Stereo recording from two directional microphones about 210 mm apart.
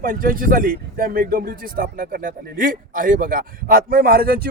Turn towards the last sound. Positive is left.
turn(degrees=-45)  # may be behind; listen again after turning